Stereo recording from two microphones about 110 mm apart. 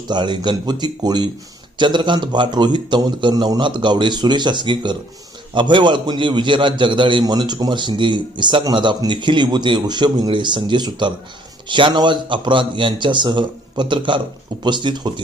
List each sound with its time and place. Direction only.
0.1 s a man's voice: 40° right (ahead or behind)